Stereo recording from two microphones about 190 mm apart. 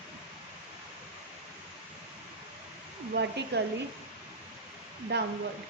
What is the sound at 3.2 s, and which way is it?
Speech, 65° right (ahead or behind).